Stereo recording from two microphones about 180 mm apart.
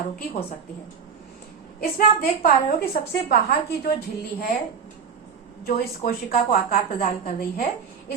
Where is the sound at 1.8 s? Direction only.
55° left (ahead or behind).